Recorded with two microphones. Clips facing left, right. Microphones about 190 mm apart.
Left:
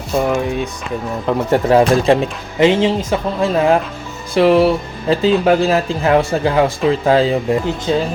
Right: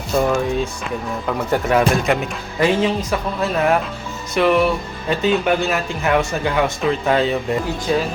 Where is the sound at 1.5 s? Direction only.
30° left (ahead or behind).